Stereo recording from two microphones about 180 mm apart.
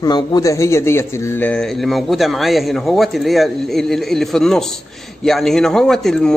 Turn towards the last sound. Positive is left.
turn(degrees=5)  # may be behind; listen again after turning